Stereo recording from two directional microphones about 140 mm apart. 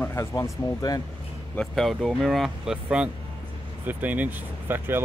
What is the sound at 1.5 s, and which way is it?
Speech, centre (ahead or behind).